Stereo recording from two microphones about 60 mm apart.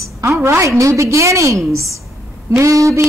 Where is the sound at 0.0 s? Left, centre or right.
Right.